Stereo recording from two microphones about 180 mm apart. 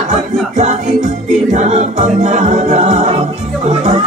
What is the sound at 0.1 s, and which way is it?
Music, 40° right (ahead or behind).